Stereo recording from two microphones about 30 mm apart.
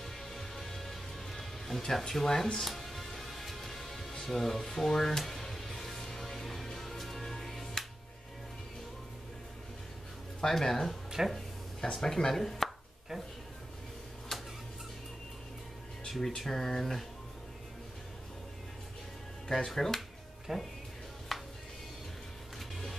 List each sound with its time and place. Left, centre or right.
0.3 s music: centre
2.2 s speech: centre
2.6 s music: centre
4.2 s speech: centre
4.6 s music: centre
10.4 s speech: centre
14.3 s a sound: centre
16.1 s speech: centre
19.4 s speech: centre
20.5 s speech: centre
21.3 s music: centre
22.6 s music: centre